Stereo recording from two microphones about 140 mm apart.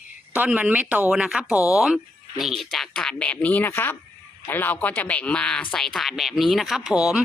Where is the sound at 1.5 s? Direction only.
20° left (ahead or behind).